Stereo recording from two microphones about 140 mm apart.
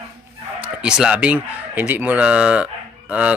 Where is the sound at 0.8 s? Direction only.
5° right (ahead or behind).